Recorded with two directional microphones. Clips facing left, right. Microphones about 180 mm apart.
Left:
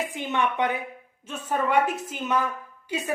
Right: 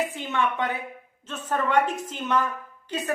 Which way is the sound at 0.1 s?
15° left (ahead or behind).